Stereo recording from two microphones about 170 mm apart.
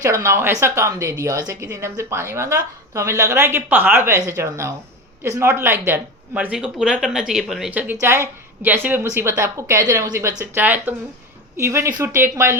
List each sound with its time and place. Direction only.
0.0 s a woman's voice: 15° right (ahead or behind)